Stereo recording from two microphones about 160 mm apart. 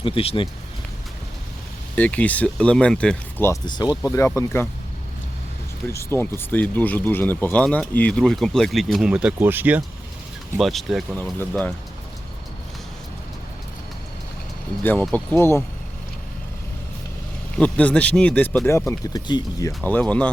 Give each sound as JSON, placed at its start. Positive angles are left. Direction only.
{"t": 0.0, "sound": "speech", "side_deg": 35}
{"t": 2.0, "sound": "speech", "side_deg": 10}
{"t": 3.7, "sound": "speech", "side_deg": 25}
{"t": 5.9, "sound": "speech", "side_deg": 15}
{"t": 10.6, "sound": "speech", "side_deg": 0}
{"t": 15.0, "sound": "speech", "side_deg": 10}
{"t": 17.6, "sound": "speech", "side_deg": 10}
{"t": 19.8, "sound": "speech", "side_deg": 10}